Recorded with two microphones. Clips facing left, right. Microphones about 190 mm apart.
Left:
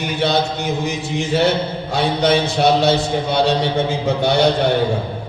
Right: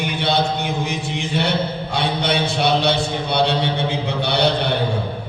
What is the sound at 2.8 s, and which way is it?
A man's voice, 45° left (ahead or behind).